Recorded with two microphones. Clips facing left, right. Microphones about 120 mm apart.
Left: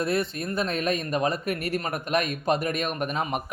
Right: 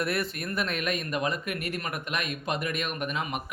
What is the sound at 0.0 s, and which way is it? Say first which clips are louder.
Speech: left 4 dB; 25° left (ahead or behind).